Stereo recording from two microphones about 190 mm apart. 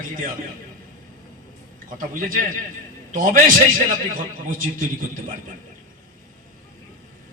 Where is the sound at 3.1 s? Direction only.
45° right (ahead or behind).